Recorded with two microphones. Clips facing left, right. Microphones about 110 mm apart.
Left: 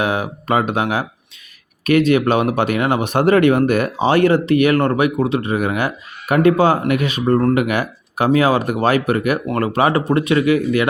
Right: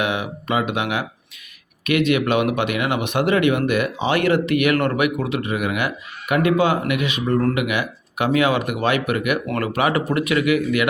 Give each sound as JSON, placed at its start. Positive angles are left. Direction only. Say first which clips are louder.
{"t": 0.0, "sound": "speech", "louder": "left 3 dB", "side_deg": 40}